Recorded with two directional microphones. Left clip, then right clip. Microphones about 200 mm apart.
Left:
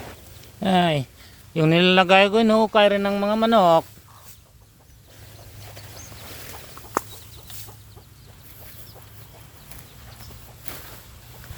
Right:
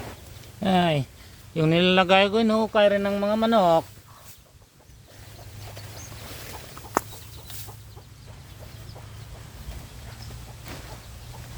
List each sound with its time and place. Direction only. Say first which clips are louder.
0.6 s speech: left 2 dB; 35° left (ahead or behind); by 3.8 s 50° left (ahead or behind)
6.2 s boat: even; 40° left (ahead or behind)